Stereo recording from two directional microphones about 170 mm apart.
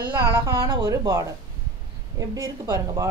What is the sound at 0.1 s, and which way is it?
Speech, 25° right (ahead or behind).